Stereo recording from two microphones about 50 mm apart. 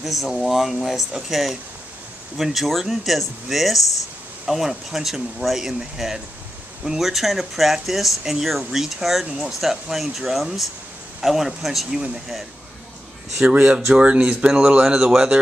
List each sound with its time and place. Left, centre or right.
0.0 s speech: centre
13.5 s speech: right